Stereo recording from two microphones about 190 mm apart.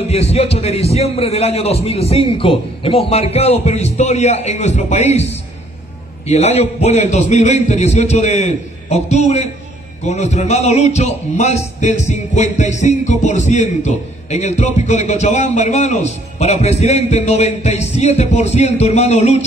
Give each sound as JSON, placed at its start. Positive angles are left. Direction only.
{"t": 0.1, "sound": "music", "side_deg": 35}